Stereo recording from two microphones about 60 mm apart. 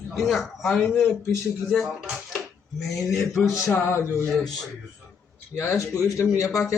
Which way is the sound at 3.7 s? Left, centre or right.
Left.